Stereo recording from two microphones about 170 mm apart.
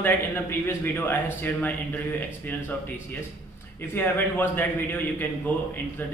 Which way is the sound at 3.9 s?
10° left (ahead or behind).